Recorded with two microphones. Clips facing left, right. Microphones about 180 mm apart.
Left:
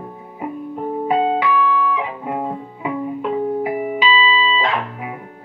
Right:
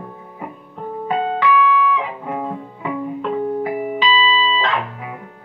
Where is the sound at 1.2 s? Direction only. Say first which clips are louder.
Left 3 dB; 5° left (ahead or behind).